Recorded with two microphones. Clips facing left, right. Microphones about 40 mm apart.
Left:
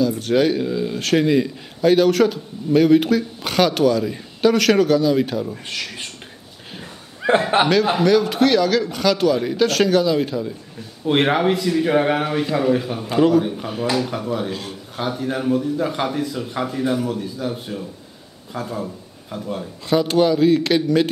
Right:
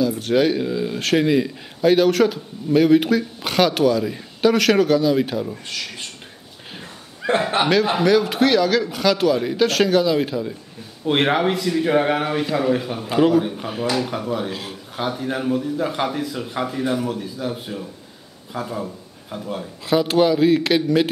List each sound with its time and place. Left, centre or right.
0.0 s speech: centre
7.2 s chuckle: left
7.6 s speech: centre